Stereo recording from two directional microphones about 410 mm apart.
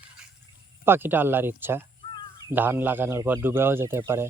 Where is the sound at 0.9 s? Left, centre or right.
Centre.